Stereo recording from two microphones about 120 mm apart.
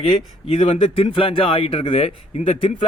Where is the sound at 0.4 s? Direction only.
55° left (ahead or behind).